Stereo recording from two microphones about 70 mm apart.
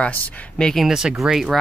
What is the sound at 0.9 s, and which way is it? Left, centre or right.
Speech, centre.